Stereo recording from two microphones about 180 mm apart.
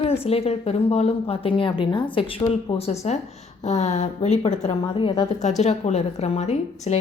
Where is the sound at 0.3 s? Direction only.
35° left (ahead or behind).